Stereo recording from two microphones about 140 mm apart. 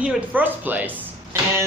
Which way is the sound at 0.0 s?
10° right (ahead or behind).